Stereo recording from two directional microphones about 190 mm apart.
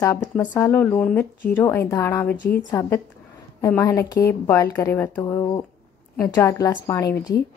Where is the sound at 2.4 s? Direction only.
70° left (ahead or behind).